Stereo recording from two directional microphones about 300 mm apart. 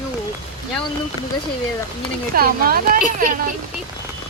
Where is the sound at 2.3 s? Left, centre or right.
Right.